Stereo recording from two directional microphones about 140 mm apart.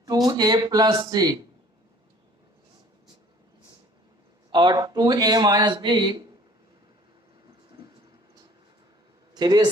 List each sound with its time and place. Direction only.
0.0 s speech: 25° right (ahead or behind)
4.5 s speech: 30° right (ahead or behind)
9.3 s a man's voice: 30° right (ahead or behind)